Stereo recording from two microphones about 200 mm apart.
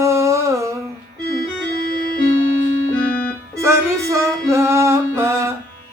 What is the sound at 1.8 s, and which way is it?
Keyboard, 45° left (ahead or behind).